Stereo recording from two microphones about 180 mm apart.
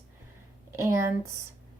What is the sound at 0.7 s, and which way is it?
Speech, 15° right (ahead or behind).